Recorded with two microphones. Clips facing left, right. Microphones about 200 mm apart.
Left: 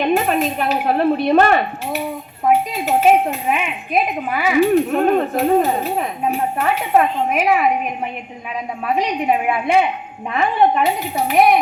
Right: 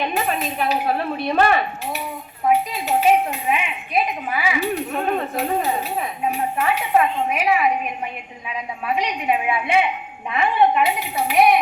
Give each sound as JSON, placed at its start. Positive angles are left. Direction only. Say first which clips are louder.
{"t": 0.0, "sound": "a woman's voice", "louder": "left 6 dB", "side_deg": 50}
{"t": 4.3, "sound": "speech", "louder": "left 8 dB", "side_deg": 45}
{"t": 8.9, "sound": "speech", "louder": "left 4 dB", "side_deg": 40}